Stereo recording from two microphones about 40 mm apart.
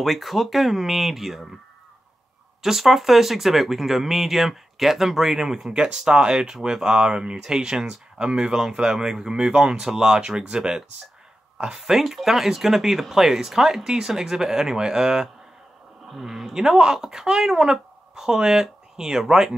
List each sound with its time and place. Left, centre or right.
0.0 s speech: centre
2.6 s speech: centre; by 10.8 s right
11.5 s a sound: right
11.8 s speech: centre